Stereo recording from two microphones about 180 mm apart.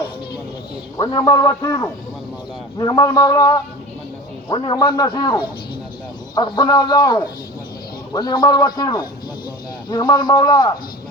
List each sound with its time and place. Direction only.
0.9 s a man's voice: 20° left (ahead or behind)